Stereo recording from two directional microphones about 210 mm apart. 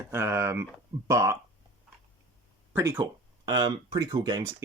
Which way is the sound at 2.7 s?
10° right (ahead or behind).